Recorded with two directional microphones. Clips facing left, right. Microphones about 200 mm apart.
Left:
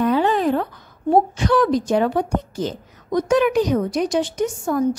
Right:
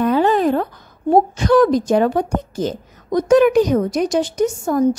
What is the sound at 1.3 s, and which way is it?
Speech, 40° right (ahead or behind).